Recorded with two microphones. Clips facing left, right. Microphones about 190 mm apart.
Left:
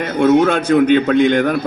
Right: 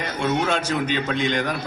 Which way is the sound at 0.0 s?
60° left (ahead or behind).